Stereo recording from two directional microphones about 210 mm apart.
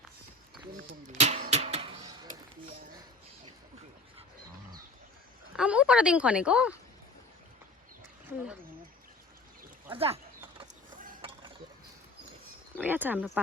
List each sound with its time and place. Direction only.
1.2 s a sound: 30° right (ahead or behind)
5.5 s a woman's voice: 5° right (ahead or behind)
9.9 s speech: 25° right (ahead or behind)
12.7 s speech: 10° right (ahead or behind)